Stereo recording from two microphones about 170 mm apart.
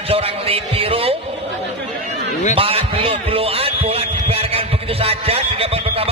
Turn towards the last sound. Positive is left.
turn(degrees=-35)  # may be behind; listen again after turning